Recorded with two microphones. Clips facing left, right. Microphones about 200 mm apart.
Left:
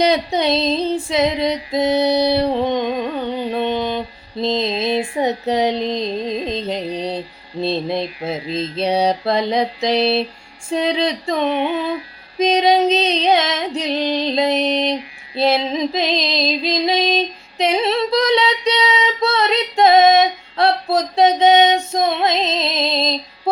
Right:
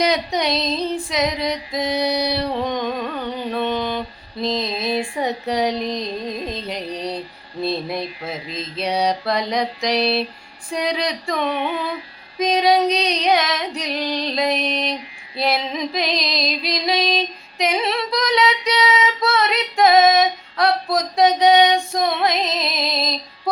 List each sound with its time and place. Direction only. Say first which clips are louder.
0.0 s female singing: left 3 dB; 25° left (ahead or behind)